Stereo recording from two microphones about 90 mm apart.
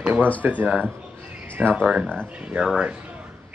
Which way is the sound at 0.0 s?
20° right (ahead or behind).